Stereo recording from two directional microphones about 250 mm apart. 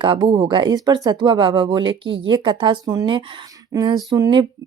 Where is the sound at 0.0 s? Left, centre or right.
Right.